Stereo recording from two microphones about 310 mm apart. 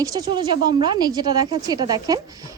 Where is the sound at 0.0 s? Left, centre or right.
Centre.